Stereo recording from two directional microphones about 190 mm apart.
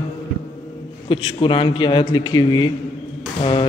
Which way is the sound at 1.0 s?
25° left (ahead or behind).